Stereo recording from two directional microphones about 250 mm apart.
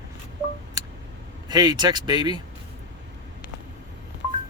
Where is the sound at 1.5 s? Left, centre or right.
Centre.